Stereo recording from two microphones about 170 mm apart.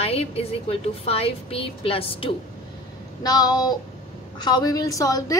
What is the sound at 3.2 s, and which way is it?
A woman's voice, 25° left (ahead or behind).